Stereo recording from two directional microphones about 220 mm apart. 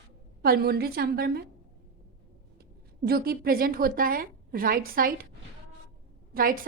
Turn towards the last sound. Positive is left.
turn(degrees=-40)  # may be behind; listen again after turning